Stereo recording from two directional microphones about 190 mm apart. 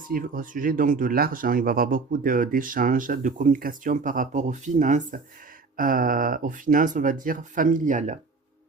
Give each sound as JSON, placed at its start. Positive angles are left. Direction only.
{"t": 0.1, "sound": "speech", "side_deg": -45}